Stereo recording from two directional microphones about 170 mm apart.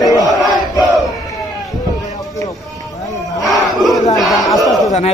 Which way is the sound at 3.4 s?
Centre (ahead or behind).